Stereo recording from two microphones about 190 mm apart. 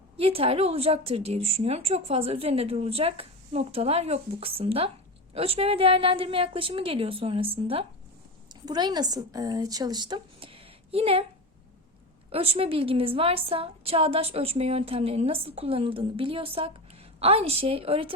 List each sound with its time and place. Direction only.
0.2 s a woman's voice: 30° right (ahead or behind)
12.3 s a woman's voice: 30° right (ahead or behind)